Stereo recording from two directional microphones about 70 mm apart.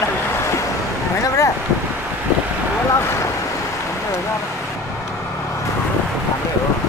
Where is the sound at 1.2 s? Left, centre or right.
Left.